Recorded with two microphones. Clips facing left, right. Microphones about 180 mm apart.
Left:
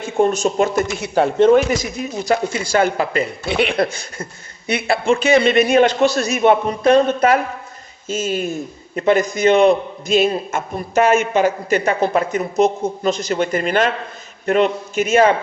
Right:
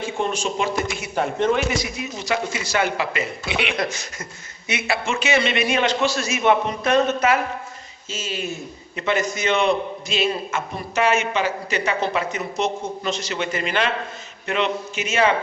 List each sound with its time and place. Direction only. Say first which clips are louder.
0.0 s a man's voice: left 8 dB; 45° left (ahead or behind)
5.0 s speech: left 9 dB; 35° left (ahead or behind)
5.4 s a man's voice: left 8 dB; 50° left (ahead or behind)
8.0 s a man's voice: left 8 dB; 50° left (ahead or behind)